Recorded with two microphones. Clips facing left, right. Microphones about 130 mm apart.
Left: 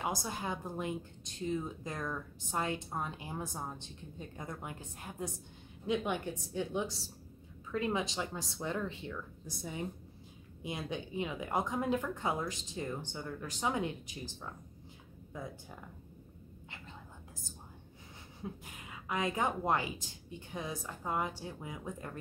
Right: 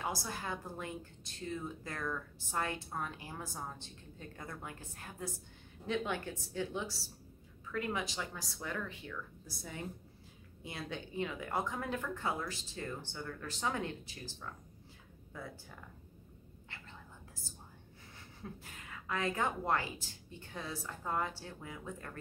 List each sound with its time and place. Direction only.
0.0 s a woman's voice: 20° left (ahead or behind)
18.4 s speech: 15° left (ahead or behind)